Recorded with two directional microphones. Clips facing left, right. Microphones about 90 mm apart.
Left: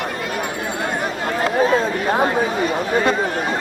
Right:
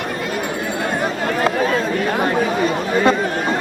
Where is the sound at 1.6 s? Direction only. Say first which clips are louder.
Left 1 dB; 25° left (ahead or behind).